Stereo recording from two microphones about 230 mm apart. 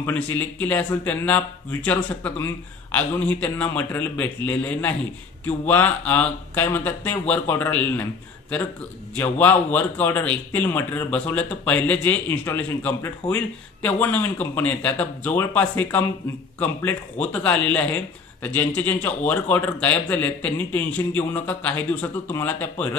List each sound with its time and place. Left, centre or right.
0.0 s a man's voice: centre